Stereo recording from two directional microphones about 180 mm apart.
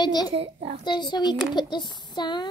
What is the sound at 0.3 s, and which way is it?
Speech, 30° right (ahead or behind).